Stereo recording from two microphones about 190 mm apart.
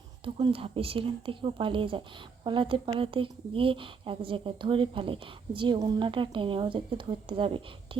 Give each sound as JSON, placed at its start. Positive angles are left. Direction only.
{"t": 0.3, "sound": "a woman's voice", "side_deg": -25}